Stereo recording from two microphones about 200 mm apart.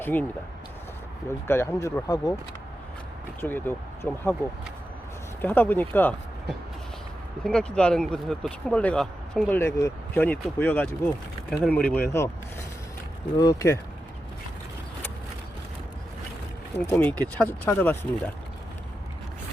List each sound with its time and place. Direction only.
0.0 s speech: 10° left (ahead or behind)
1.5 s speech: 15° left (ahead or behind)
3.4 s speech: 10° left (ahead or behind)
5.4 s speech: 10° left (ahead or behind)
7.4 s speech: 5° left (ahead or behind)
13.3 s speech: 20° left (ahead or behind)
16.7 s speech: 10° left (ahead or behind)